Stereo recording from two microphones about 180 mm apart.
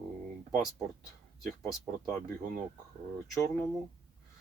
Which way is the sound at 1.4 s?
Centre (ahead or behind).